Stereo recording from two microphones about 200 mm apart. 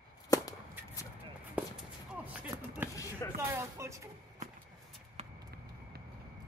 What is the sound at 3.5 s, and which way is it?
Speech, 15° right (ahead or behind).